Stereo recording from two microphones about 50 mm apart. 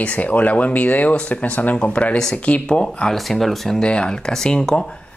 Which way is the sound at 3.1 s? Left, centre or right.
Centre.